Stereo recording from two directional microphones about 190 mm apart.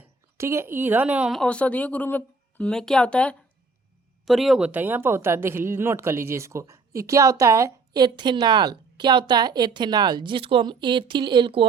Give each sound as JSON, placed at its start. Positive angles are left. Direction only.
{"t": 0.3, "sound": "speech", "side_deg": -15}